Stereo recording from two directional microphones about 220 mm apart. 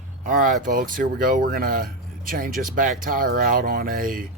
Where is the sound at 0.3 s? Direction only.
35° right (ahead or behind).